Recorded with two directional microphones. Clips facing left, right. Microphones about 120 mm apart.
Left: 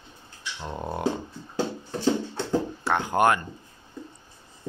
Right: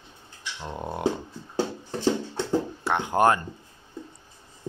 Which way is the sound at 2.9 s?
20° right (ahead or behind).